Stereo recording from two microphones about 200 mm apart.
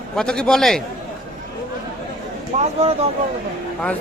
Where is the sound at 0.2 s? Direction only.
5° left (ahead or behind).